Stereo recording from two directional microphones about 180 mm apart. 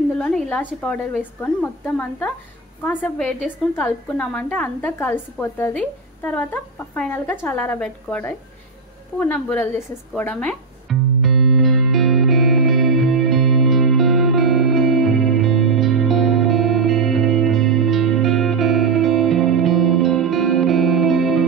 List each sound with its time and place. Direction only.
0.2 s a woman's voice: 5° left (ahead or behind)
9.2 s music: 10° left (ahead or behind)